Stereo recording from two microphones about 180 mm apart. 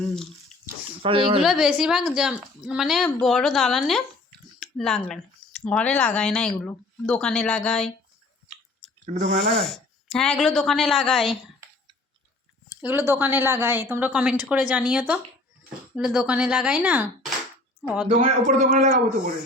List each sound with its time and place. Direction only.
1.0 s speech: 30° right (ahead or behind)
1.4 s speech: 5° right (ahead or behind)
9.0 s a man's voice: 45° right (ahead or behind)
9.6 s speech: centre (ahead or behind)
12.8 s a woman's voice: 10° right (ahead or behind)
18.1 s a man's voice: 40° right (ahead or behind)